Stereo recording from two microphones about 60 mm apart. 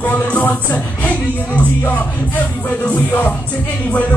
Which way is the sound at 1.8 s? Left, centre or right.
Left.